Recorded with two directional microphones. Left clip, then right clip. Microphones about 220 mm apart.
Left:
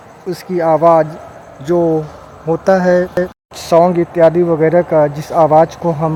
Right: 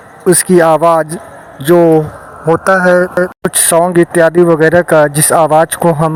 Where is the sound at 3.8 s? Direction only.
20° right (ahead or behind).